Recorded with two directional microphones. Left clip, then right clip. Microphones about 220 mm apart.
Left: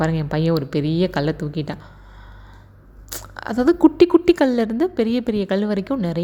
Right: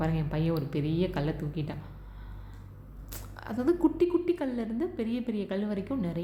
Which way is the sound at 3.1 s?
40° left (ahead or behind).